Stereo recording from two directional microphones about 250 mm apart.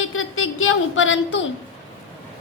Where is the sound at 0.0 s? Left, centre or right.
Left.